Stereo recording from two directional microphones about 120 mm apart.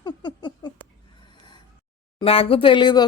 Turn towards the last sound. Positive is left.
turn(degrees=40)  # may be behind; listen again after turning